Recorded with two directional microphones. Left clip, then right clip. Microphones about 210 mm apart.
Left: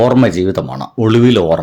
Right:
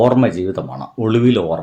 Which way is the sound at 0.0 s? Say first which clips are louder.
Left 3 dB; 40° left (ahead or behind).